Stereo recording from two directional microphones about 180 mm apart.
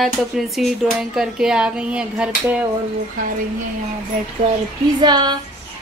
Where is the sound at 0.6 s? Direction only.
Centre (ahead or behind).